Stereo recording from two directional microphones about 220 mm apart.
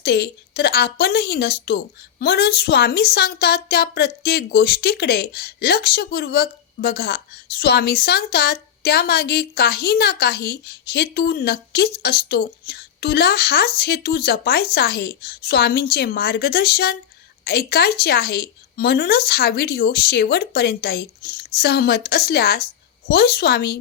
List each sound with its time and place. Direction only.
0.0 s a woman's voice: 45° left (ahead or behind)